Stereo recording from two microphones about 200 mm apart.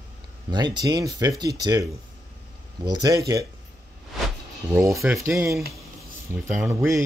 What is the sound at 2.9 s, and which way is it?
Speech, 20° right (ahead or behind).